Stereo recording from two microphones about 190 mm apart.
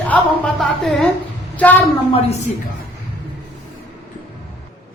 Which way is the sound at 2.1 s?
35° left (ahead or behind).